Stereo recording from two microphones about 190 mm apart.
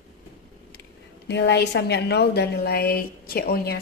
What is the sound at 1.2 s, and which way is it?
A woman's voice, 60° left (ahead or behind).